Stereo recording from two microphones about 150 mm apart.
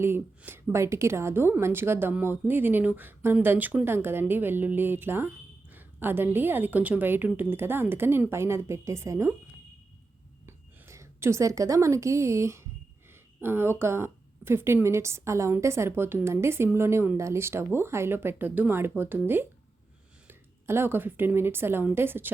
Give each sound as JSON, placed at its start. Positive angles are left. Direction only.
{"t": 0.0, "sound": "a woman's voice", "side_deg": -15}
{"t": 10.4, "sound": "a woman's voice", "side_deg": -20}